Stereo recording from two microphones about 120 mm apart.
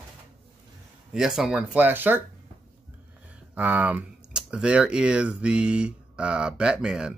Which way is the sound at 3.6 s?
15° right (ahead or behind).